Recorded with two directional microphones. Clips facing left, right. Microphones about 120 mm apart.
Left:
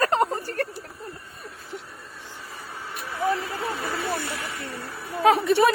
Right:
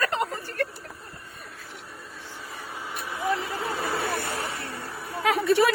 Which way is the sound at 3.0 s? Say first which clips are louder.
Left 5 dB; 15° right (ahead or behind).